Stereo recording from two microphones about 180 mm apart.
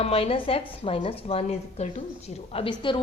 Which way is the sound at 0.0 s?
30° left (ahead or behind).